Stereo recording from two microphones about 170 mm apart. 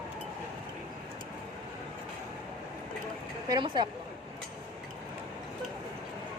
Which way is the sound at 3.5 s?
25° right (ahead or behind).